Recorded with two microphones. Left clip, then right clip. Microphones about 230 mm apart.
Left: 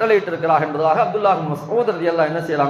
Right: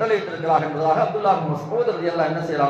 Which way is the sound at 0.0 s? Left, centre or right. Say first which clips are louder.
Left 5 dB; left.